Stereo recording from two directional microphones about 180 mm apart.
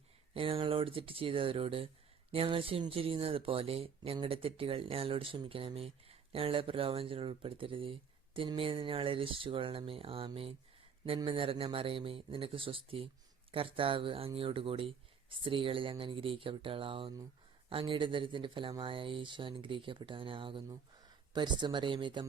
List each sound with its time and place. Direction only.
0.3 s speech: 30° right (ahead or behind)